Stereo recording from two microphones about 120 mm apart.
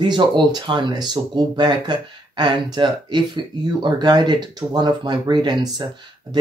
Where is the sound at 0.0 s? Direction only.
40° right (ahead or behind).